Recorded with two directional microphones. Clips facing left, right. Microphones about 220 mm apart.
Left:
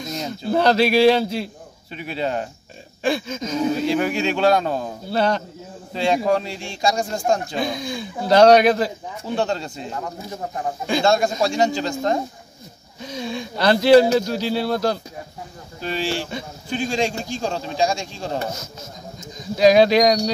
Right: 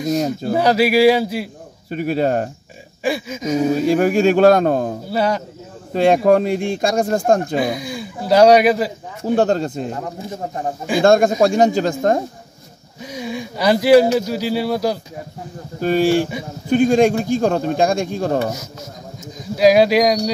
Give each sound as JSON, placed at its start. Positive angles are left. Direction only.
{"t": 0.5, "sound": "speech", "side_deg": -10}
{"t": 1.9, "sound": "speech", "side_deg": -45}
{"t": 3.0, "sound": "speech", "side_deg": -10}
{"t": 3.8, "sound": "speech", "side_deg": -45}
{"t": 5.1, "sound": "speech", "side_deg": -10}
{"t": 5.9, "sound": "speech", "side_deg": -55}
{"t": 7.5, "sound": "speech", "side_deg": -10}
{"t": 9.2, "sound": "speech", "side_deg": -50}
{"t": 11.0, "sound": "speech", "side_deg": -50}
{"t": 13.0, "sound": "speech", "side_deg": -10}
{"t": 15.8, "sound": "speech", "side_deg": -50}
{"t": 19.5, "sound": "speech", "side_deg": -5}